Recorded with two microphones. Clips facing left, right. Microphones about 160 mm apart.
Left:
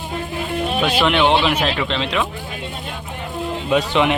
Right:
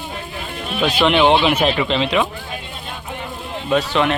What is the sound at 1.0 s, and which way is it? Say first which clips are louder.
Speech: right 3 dB; centre (ahead or behind).